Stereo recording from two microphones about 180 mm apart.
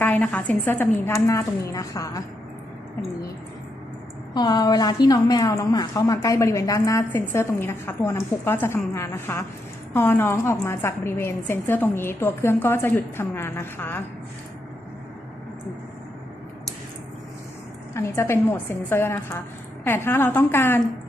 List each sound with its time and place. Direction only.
0.0 s a woman's voice: 10° left (ahead or behind)
4.4 s a woman's voice: 20° left (ahead or behind)
17.9 s a woman's voice: 15° left (ahead or behind)